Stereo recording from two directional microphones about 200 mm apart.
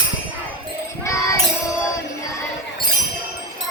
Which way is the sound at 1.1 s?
15° left (ahead or behind).